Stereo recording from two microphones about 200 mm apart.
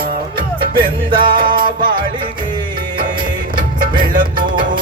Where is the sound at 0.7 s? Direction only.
25° right (ahead or behind).